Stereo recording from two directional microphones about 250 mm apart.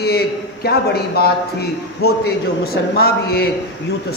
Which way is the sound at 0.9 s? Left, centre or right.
Left.